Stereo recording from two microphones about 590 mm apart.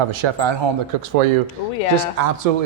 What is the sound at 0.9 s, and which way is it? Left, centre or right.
Speech, right.